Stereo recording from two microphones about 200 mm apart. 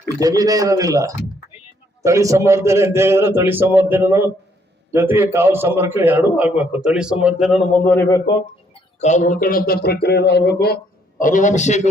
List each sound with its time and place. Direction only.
0.2 s a man's voice: 20° right (ahead or behind); by 7.8 s centre (ahead or behind)
7.9 s speech: 15° left (ahead or behind)
9.0 s speech: 35° left (ahead or behind); by 10.8 s 55° left (ahead or behind)
11.2 s a man's voice: 40° left (ahead or behind)